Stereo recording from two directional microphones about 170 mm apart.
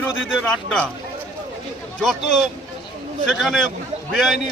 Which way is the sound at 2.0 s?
Centre (ahead or behind).